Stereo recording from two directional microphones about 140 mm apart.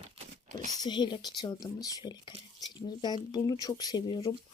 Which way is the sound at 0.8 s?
30° left (ahead or behind).